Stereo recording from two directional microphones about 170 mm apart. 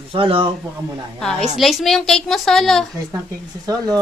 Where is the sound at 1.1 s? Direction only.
5° left (ahead or behind).